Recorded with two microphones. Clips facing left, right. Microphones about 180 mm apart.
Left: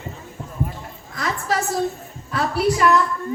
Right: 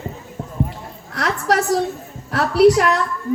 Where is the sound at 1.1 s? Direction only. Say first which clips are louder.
Right 4 dB; 75° right (ahead or behind).